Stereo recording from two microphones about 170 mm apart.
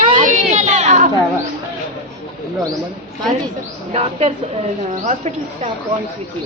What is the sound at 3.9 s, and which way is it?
Speech, 35° right (ahead or behind).